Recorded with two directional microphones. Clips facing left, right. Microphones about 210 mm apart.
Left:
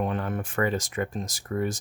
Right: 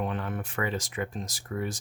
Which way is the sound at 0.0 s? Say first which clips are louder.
Left 3 dB; 45° left (ahead or behind).